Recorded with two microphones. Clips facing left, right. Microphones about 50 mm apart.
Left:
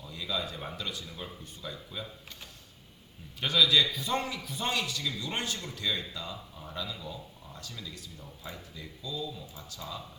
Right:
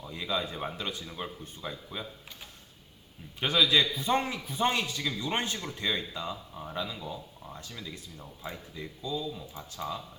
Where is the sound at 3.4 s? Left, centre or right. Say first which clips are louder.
Even; right.